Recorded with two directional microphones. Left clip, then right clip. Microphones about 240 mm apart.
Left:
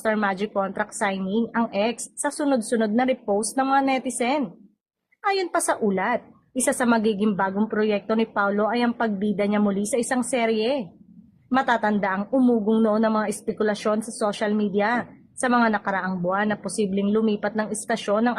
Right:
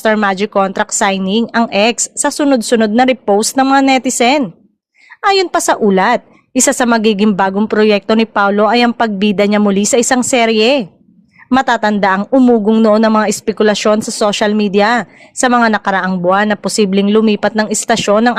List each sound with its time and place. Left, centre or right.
0.0 s speech: right